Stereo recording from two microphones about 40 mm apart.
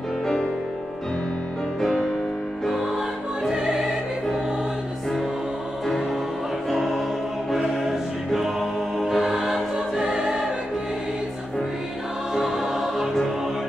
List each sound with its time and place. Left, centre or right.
1.8 s music: centre
3.5 s music: centre
6.7 s music: centre
8.3 s music: centre
9.9 s choir: centre
12.4 s music: centre